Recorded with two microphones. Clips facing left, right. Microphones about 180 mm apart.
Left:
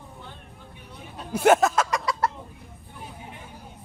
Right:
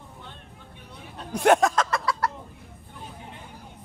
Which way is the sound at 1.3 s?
5° left (ahead or behind).